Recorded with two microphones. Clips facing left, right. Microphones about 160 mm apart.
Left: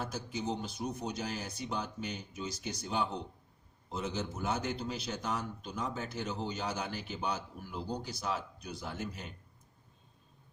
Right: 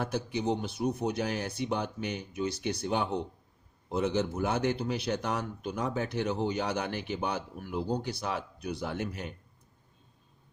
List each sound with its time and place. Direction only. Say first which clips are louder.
0.0 s a man's voice: right 6 dB; 65° right (ahead or behind)